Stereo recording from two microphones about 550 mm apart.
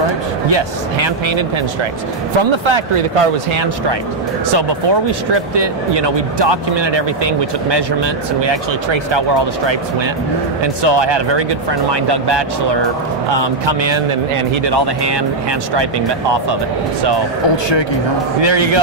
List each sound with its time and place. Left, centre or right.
0.5 s speech: right
2.5 s speech: right
4.5 s speech: right
10.6 s speech: right
18.4 s speech: right